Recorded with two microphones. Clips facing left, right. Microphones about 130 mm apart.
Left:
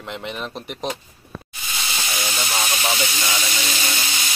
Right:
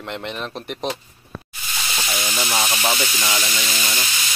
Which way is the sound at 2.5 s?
15° right (ahead or behind).